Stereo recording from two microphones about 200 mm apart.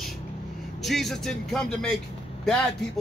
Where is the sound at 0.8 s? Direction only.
Centre (ahead or behind).